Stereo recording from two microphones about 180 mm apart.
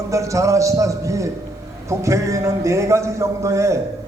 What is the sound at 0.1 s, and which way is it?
A man's voice, 15° right (ahead or behind).